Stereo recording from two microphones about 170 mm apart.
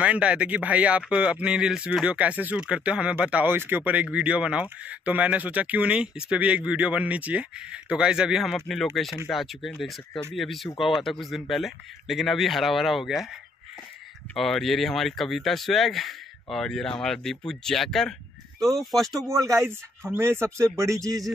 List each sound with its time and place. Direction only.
0.0 s speech: 5° right (ahead or behind)
14.3 s speech: centre (ahead or behind)
19.2 s a man's voice: 20° right (ahead or behind)